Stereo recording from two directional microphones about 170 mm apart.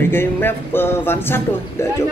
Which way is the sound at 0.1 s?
10° left (ahead or behind).